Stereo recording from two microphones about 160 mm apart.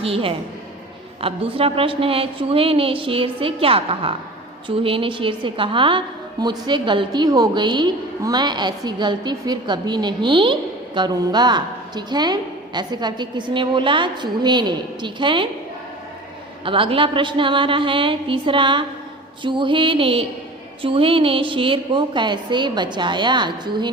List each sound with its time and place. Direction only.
0.0 s a woman's voice: 35° right (ahead or behind)
16.6 s a woman's voice: 30° right (ahead or behind)